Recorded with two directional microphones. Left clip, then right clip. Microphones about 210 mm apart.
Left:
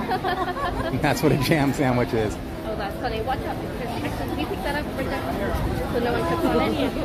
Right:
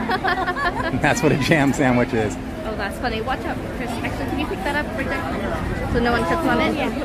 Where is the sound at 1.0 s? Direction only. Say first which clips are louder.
Right 2 dB; 5° right (ahead or behind).